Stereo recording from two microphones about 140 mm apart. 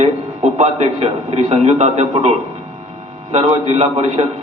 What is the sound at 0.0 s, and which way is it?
A man's voice, 50° right (ahead or behind).